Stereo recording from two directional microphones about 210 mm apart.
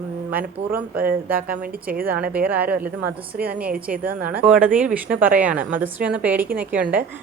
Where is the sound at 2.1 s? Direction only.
5° right (ahead or behind).